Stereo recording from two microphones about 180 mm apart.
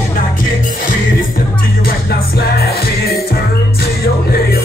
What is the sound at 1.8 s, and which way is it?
Music, 60° left (ahead or behind).